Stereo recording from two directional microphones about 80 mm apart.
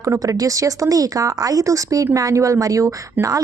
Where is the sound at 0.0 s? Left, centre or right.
Right.